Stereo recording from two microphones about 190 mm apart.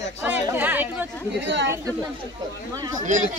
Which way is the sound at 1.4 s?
70° right (ahead or behind).